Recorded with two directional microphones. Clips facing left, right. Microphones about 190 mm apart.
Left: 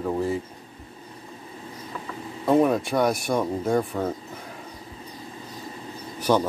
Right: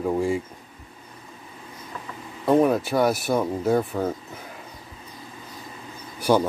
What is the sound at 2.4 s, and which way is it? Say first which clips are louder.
Speech: right 1 dB; centre (ahead or behind).